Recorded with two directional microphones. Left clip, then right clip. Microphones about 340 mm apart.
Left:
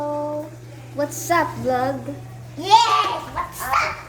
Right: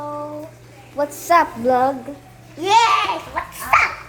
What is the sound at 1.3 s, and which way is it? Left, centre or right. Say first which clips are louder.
Child singing: right 5 dB; centre.